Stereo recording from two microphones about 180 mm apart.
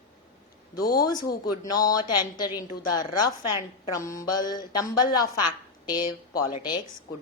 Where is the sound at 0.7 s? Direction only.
20° left (ahead or behind).